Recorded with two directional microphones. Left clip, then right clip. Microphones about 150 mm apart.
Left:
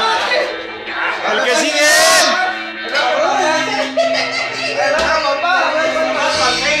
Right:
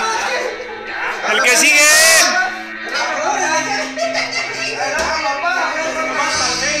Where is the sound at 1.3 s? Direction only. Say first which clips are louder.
Right 4 dB; 15° right (ahead or behind).